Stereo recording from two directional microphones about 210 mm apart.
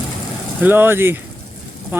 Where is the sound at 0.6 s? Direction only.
10° right (ahead or behind).